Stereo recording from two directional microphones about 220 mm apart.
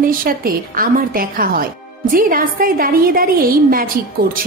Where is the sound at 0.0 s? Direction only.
40° right (ahead or behind).